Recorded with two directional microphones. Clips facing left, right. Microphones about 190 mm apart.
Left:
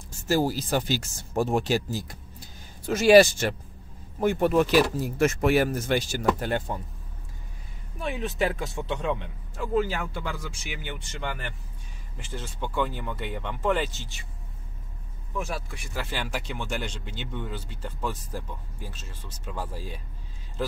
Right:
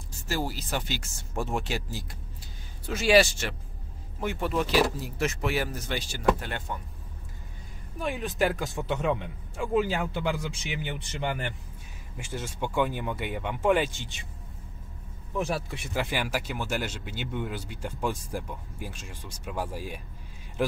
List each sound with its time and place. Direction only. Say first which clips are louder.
0.3 s speech: left 7 dB; 40° left (ahead or behind)
8.0 s speech: even; centre (ahead or behind)
15.3 s speech: right 3 dB; 25° right (ahead or behind); by 20.0 s 10° right (ahead or behind)